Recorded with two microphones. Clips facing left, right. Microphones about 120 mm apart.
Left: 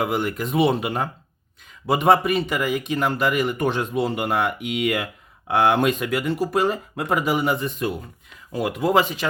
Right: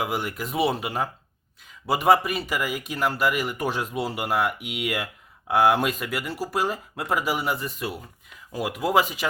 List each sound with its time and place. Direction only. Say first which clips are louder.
0.0 s speech: left 5 dB; 5° right (ahead or behind)